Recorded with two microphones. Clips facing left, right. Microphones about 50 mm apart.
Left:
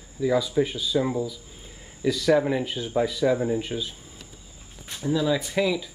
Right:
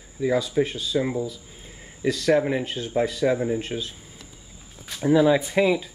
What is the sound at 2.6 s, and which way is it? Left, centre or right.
Speech, right.